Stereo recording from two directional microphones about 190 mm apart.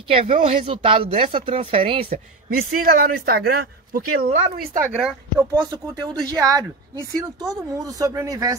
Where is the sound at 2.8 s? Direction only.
50° right (ahead or behind).